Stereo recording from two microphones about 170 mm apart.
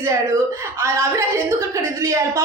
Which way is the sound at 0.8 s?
15° right (ahead or behind).